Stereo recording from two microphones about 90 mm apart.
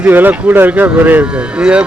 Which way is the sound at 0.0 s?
20° right (ahead or behind).